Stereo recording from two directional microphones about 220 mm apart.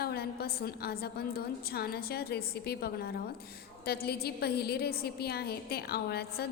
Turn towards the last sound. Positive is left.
turn(degrees=45)  # may be behind; listen again after turning